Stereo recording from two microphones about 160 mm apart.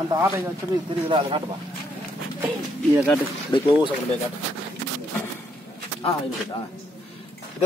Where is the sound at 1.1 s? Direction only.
35° right (ahead or behind).